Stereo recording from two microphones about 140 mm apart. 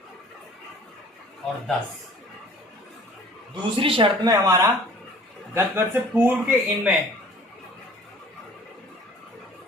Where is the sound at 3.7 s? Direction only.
40° right (ahead or behind).